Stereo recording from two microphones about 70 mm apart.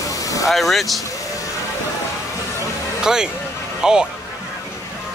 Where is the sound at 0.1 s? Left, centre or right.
Left.